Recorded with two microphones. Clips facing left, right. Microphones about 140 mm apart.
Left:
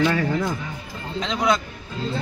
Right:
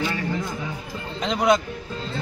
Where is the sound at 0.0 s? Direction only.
75° left (ahead or behind).